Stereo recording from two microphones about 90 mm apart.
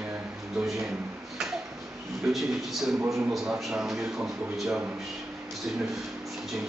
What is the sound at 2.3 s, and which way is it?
Speech, 5° right (ahead or behind).